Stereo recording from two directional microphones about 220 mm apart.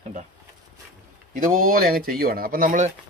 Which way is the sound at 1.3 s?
40° right (ahead or behind).